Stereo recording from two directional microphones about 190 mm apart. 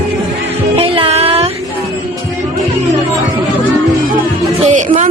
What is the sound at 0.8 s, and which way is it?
Music, 30° right (ahead or behind).